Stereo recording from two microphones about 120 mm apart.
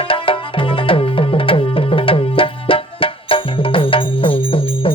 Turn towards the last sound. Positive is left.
turn(degrees=50)  # may be behind; listen again after turning